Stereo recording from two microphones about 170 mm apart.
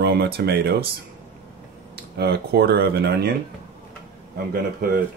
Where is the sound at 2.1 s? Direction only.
70° right (ahead or behind).